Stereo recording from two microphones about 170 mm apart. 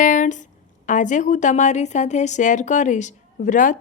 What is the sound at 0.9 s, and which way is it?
A woman's voice, 45° left (ahead or behind).